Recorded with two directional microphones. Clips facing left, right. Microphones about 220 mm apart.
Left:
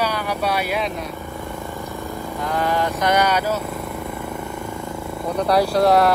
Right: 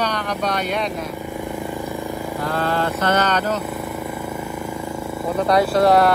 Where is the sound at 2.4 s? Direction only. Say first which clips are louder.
Left 1 dB; 15° left (ahead or behind).